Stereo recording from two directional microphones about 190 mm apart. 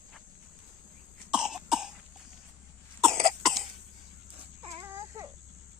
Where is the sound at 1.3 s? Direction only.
5° right (ahead or behind).